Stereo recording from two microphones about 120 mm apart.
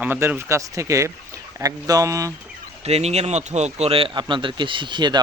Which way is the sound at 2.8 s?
60° right (ahead or behind).